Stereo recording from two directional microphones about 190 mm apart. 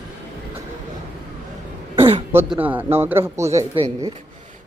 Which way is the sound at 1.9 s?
30° right (ahead or behind).